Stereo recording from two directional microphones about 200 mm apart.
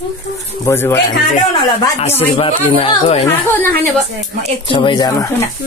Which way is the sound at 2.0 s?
30° left (ahead or behind).